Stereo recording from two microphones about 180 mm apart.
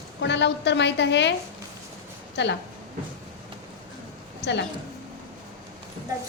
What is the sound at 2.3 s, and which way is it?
Speech, 75° left (ahead or behind).